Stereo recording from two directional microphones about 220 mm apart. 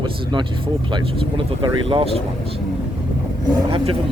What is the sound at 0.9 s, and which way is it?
Speech, 25° right (ahead or behind).